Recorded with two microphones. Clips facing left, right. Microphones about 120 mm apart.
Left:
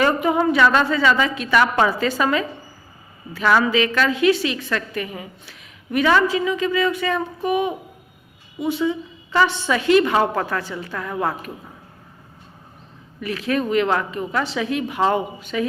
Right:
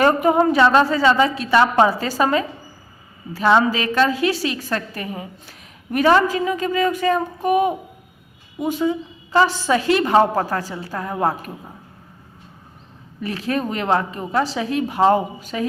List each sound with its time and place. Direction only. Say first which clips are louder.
0.0 s a woman's voice: right 3 dB; 40° right (ahead or behind)
13.2 s a woman's voice: left 1 dB; 35° right (ahead or behind)